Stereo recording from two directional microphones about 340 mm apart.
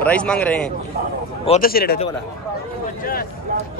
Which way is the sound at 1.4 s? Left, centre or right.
Left.